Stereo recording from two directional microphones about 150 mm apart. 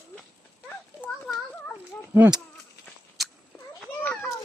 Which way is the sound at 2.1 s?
10° right (ahead or behind).